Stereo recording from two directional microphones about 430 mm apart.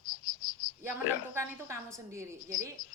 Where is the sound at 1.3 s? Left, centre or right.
Centre.